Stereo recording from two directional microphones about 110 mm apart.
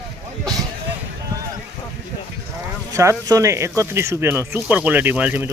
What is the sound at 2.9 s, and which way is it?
Speech, 30° right (ahead or behind).